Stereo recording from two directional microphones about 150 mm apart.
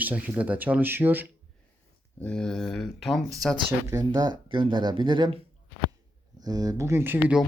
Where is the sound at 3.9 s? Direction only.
25° right (ahead or behind).